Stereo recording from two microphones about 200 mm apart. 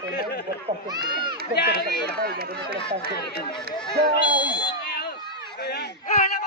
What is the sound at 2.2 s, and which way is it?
Speech, 50° right (ahead or behind).